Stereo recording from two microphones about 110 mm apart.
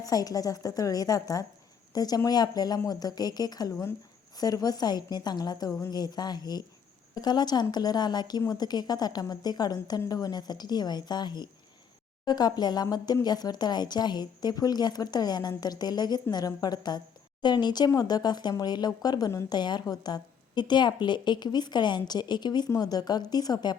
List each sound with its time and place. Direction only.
0.0 s a woman's voice: 35° left (ahead or behind)